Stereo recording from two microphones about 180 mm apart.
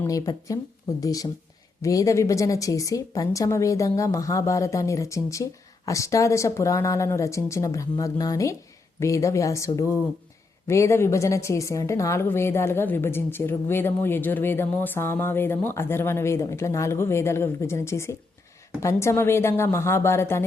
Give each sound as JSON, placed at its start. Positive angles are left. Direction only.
{"t": 0.0, "sound": "a woman's voice", "side_deg": 20}